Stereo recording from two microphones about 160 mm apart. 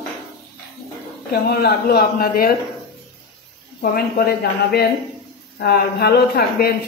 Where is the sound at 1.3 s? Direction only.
80° left.